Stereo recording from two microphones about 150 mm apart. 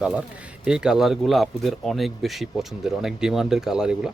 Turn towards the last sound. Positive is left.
turn(degrees=-5)  # may be behind; listen again after turning